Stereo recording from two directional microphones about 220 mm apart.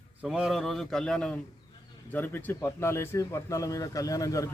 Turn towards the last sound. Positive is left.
turn(degrees=15)  # may be behind; listen again after turning